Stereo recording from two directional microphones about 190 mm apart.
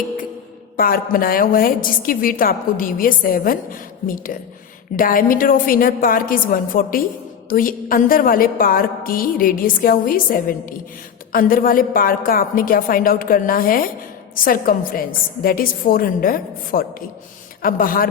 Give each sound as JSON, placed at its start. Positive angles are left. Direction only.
{"t": 0.8, "sound": "a woman's voice", "side_deg": 50}